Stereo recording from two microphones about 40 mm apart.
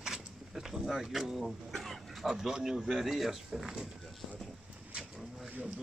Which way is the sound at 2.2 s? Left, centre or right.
Centre.